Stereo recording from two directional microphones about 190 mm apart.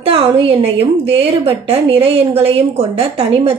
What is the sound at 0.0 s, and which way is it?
A woman's voice, 30° right (ahead or behind).